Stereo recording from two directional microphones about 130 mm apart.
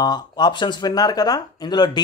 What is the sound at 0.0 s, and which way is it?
A man's voice, 30° left (ahead or behind).